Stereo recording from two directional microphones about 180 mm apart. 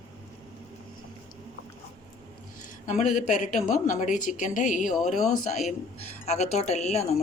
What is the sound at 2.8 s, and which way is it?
Speech, 40° left (ahead or behind).